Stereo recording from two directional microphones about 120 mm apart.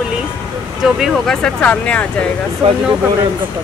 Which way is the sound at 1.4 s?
10° left (ahead or behind).